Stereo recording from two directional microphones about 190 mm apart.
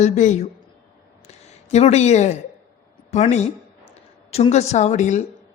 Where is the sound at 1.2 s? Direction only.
35° left (ahead or behind).